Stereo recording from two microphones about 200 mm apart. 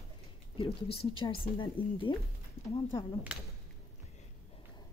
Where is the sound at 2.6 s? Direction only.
90° left.